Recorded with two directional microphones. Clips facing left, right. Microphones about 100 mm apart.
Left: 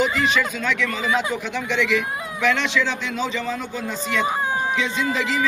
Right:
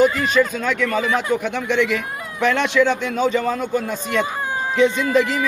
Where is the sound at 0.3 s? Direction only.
45° right (ahead or behind).